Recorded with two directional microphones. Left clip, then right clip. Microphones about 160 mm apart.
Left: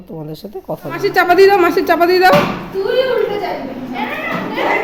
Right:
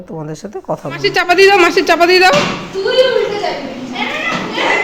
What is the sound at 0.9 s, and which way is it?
A woman's voice, 5° left (ahead or behind).